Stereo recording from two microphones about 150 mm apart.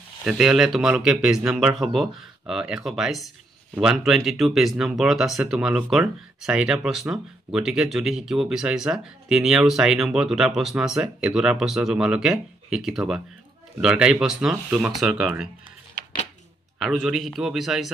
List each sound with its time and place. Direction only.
0.2 s speech: 5° right (ahead or behind)
16.8 s speech: centre (ahead or behind)